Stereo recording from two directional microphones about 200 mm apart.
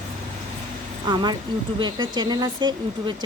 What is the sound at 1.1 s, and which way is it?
Speech, 20° right (ahead or behind).